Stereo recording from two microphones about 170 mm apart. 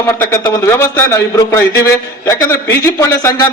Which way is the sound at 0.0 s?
15° left (ahead or behind).